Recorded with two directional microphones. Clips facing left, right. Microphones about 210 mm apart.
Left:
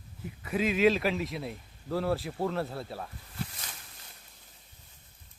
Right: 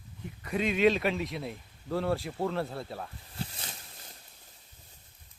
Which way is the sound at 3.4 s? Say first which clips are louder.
Even; 30° right (ahead or behind).